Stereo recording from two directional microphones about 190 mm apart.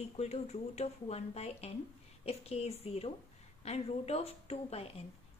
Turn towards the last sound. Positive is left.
turn(degrees=35)  # may be behind; listen again after turning